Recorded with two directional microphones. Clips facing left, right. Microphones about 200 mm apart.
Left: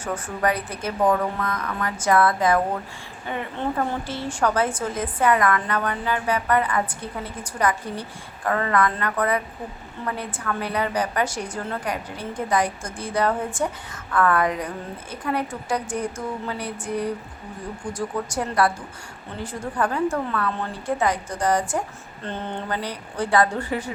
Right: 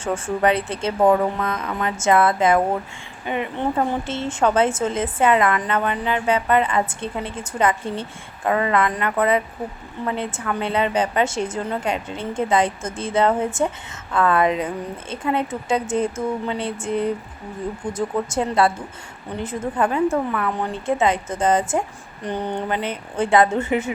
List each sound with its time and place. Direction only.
0.0 s a woman's voice: 25° right (ahead or behind)